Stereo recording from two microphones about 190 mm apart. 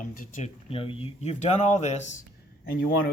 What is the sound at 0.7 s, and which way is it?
Speech, 30° left (ahead or behind).